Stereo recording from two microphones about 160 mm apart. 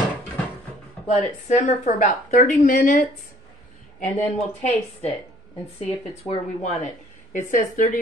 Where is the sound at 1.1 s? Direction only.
45° left (ahead or behind).